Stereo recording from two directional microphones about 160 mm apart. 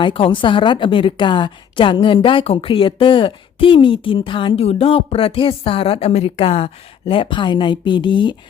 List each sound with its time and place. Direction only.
0.0 s a woman's voice: 35° left (ahead or behind)